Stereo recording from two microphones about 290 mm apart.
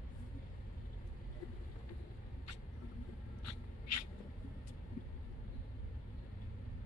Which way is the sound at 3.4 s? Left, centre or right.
Left.